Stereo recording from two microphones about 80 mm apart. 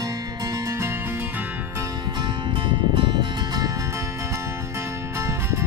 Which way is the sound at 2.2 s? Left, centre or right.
Right.